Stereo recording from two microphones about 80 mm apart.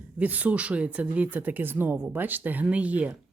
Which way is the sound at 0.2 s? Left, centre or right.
Centre.